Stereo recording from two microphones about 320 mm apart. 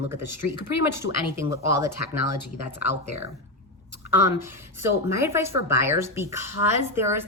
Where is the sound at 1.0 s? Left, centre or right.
Centre.